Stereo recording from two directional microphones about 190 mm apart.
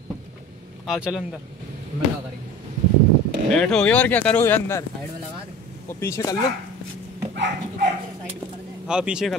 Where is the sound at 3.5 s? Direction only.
5° left (ahead or behind).